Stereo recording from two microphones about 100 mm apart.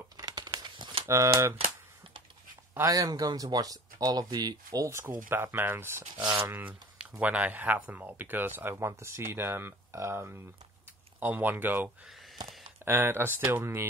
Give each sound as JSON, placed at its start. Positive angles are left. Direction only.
{"t": 0.2, "sound": "crumpling", "side_deg": -40}
{"t": 1.0, "sound": "speech", "side_deg": -30}
{"t": 2.9, "sound": "speech", "side_deg": -40}